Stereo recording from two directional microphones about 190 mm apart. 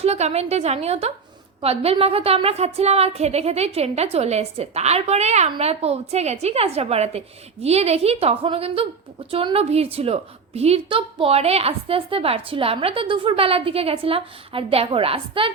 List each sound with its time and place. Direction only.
0.0 s a woman's voice: 35° right (ahead or behind)